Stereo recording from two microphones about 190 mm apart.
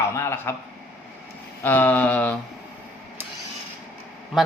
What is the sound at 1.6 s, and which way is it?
Speech, 10° left (ahead or behind).